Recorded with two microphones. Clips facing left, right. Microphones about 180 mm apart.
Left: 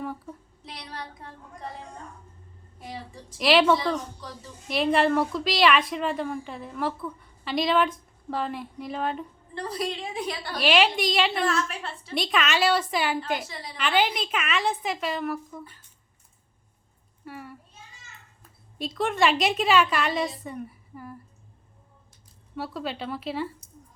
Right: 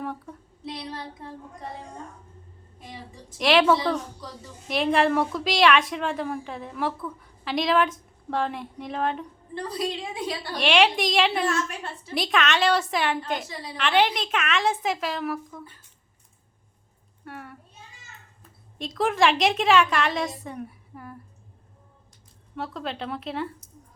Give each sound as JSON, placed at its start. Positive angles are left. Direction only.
{"t": 0.0, "sound": "speech", "side_deg": 0}
{"t": 0.8, "sound": "a sound", "side_deg": -25}
{"t": 3.3, "sound": "a woman's voice", "side_deg": 0}
{"t": 10.6, "sound": "a woman's voice", "side_deg": 0}
{"t": 17.2, "sound": "a sound", "side_deg": 0}
{"t": 18.8, "sound": "a woman's voice", "side_deg": 0}
{"t": 22.5, "sound": "a woman's voice", "side_deg": 5}